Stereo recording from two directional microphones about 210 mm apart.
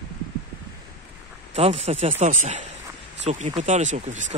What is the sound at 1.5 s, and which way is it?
Speech, 30° right (ahead or behind).